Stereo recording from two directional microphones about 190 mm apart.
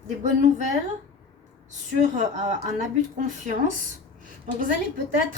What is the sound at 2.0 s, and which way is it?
A woman's voice, 40° right (ahead or behind).